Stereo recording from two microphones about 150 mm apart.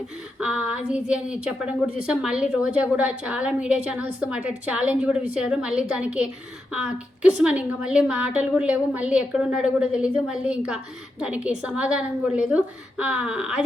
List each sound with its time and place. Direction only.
0.3 s a woman's voice: 5° right (ahead or behind)